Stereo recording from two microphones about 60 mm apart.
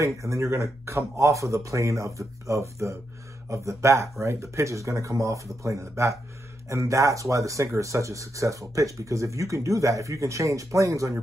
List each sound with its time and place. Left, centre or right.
0.0 s speech: right